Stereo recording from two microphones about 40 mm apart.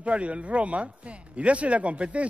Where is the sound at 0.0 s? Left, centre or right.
Right.